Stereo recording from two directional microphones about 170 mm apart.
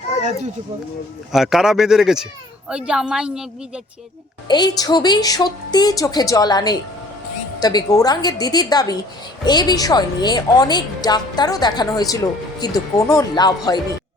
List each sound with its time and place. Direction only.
1.3 s speech: centre (ahead or behind)
4.4 s a woman's voice: 25° left (ahead or behind)